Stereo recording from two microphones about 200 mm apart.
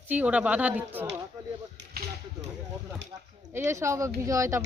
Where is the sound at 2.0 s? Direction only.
50° right (ahead or behind).